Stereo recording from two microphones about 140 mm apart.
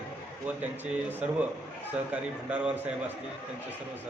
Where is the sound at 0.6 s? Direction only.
10° right (ahead or behind).